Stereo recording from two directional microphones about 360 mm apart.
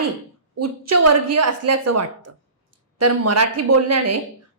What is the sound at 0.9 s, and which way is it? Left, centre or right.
A woman's voice, right.